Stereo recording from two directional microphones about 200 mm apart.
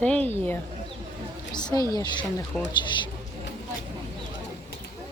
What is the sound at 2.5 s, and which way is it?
Speech, centre (ahead or behind).